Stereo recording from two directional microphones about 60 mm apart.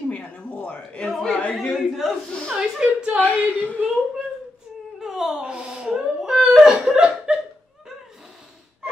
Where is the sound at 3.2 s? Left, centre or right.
Left.